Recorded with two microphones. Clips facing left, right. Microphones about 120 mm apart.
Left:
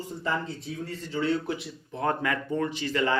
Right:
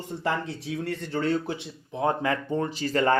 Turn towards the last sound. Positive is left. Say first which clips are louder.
# right 3 dB
turn(degrees=-40)  # may be behind; listen again after turning